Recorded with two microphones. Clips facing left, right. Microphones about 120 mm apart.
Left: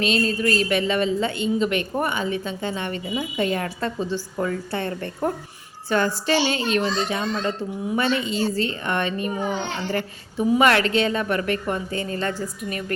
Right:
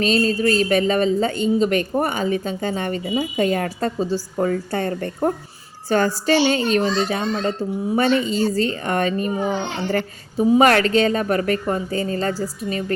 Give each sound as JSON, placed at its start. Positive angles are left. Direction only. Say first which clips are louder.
{"t": 0.0, "sound": "speech", "louder": "right 4 dB", "side_deg": -40}
{"t": 10.6, "sound": "speech", "louder": "right 3 dB", "side_deg": -40}